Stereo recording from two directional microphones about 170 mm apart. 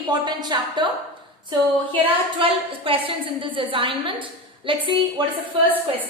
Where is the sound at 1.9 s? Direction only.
30° right (ahead or behind).